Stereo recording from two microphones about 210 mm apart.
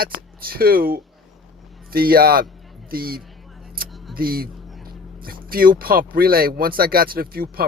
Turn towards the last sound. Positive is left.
turn(degrees=-45)  # may be behind; listen again after turning